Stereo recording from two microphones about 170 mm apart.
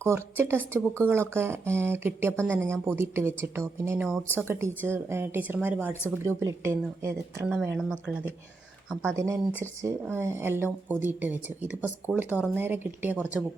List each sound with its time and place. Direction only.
0.0 s speech: 15° right (ahead or behind)
9.1 s speech: 15° right (ahead or behind)